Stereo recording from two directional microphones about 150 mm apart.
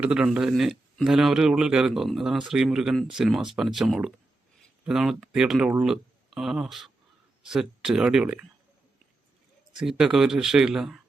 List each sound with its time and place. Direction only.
0.0 s a man's voice: 5° right (ahead or behind)
9.7 s a man's voice: 5° right (ahead or behind)